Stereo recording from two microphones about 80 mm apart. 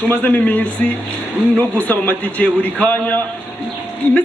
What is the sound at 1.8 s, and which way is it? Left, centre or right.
A man's voice, centre.